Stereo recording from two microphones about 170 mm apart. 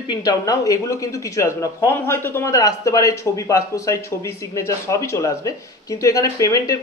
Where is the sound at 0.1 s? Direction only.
20° left (ahead or behind).